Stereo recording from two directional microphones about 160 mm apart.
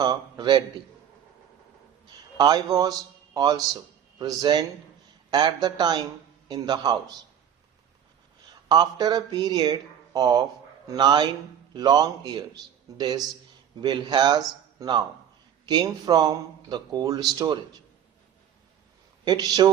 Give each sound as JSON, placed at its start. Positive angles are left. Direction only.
{"t": 0.0, "sound": "a man's voice", "side_deg": -25}
{"t": 2.1, "sound": "a man's voice", "side_deg": -25}
{"t": 8.7, "sound": "speech", "side_deg": -25}
{"t": 19.2, "sound": "speech", "side_deg": -25}